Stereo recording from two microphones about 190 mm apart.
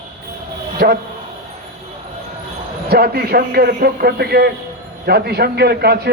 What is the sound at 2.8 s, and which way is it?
A man's voice, 55° right (ahead or behind).